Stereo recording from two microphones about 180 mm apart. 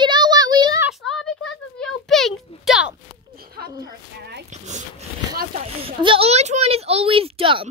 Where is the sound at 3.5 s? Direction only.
65° right (ahead or behind).